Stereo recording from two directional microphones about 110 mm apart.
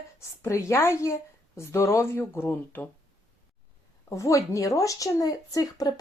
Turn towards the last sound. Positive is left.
turn(degrees=35)  # may be behind; listen again after turning